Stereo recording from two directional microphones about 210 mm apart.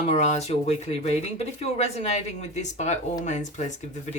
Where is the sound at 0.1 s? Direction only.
30° left (ahead or behind).